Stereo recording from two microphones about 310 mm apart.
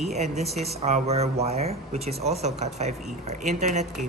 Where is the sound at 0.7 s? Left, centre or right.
Centre.